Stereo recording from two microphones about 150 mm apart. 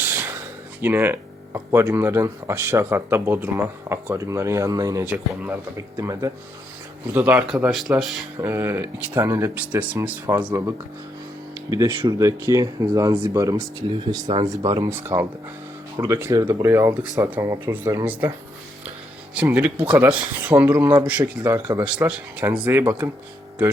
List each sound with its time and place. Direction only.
0.0 s a sound: 15° right (ahead or behind)
0.8 s speech: 15° right (ahead or behind)
5.0 s speech: 10° right (ahead or behind)
5.7 s speech: 20° right (ahead or behind); by 8.3 s centre (ahead or behind)
8.4 s speech: 15° right (ahead or behind)
11.9 s speech: 25° right (ahead or behind)
19.3 s speech: 10° right (ahead or behind)
21.8 s speech: 5° right (ahead or behind)